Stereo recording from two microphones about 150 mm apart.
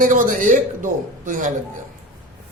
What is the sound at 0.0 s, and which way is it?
A man's voice, 60° right (ahead or behind).